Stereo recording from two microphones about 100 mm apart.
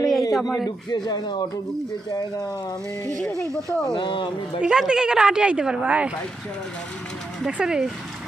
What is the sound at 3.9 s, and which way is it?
Speech, 55° left (ahead or behind).